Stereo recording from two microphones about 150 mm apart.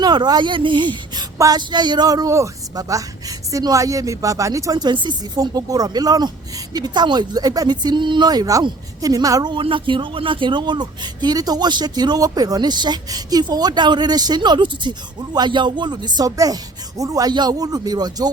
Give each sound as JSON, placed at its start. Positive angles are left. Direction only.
{"t": 0.0, "sound": "speech", "side_deg": -30}